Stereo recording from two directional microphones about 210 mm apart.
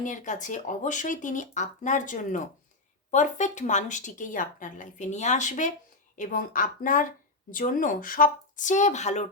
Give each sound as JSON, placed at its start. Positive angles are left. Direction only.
{"t": 0.0, "sound": "speech", "side_deg": 35}